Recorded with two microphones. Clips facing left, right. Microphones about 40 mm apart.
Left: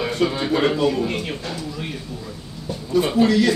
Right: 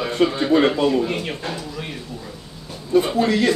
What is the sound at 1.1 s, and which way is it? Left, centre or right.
Speech, centre.